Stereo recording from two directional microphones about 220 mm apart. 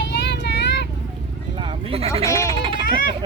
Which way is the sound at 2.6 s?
25° right (ahead or behind).